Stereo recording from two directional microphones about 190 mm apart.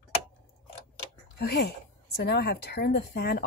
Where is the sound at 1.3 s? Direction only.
60° left (ahead or behind).